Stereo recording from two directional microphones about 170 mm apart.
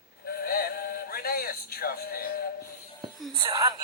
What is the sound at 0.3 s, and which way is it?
Music, 60° left (ahead or behind).